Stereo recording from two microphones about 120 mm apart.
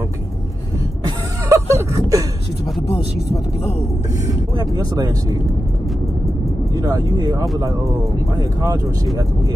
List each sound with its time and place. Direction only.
1.0 s music: 25° right (ahead or behind)
4.7 s speech: 30° right (ahead or behind)
6.7 s speech: 35° right (ahead or behind)